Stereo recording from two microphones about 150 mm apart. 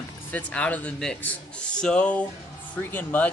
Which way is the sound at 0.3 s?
10° left (ahead or behind).